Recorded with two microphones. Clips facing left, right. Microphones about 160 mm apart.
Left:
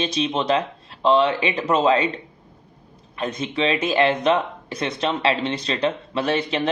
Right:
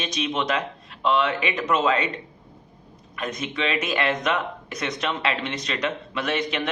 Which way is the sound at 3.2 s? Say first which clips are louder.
Left 4 dB; 30° left (ahead or behind).